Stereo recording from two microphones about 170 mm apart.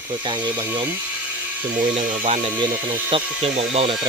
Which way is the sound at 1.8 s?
45° right (ahead or behind).